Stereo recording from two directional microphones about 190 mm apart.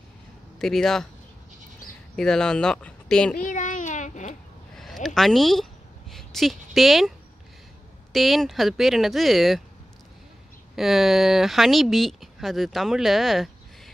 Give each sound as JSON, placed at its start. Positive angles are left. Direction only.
{"t": 0.6, "sound": "speech", "side_deg": 0}
{"t": 2.1, "sound": "speech", "side_deg": 5}
{"t": 3.4, "sound": "a sound", "side_deg": 40}
{"t": 4.7, "sound": "a sound", "side_deg": 0}
{"t": 8.1, "sound": "speech", "side_deg": 0}
{"t": 10.8, "sound": "speech", "side_deg": 0}